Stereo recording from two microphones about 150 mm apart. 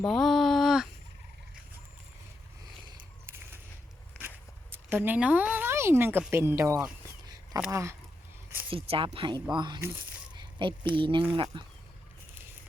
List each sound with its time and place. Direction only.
0.0 s speech: centre (ahead or behind)
4.7 s speech: 15° right (ahead or behind)
8.7 s a woman's voice: 35° right (ahead or behind)